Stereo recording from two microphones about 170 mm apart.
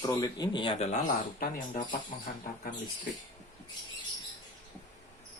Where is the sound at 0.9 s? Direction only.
50° left (ahead or behind).